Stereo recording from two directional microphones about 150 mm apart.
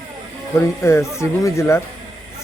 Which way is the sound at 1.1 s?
20° left (ahead or behind).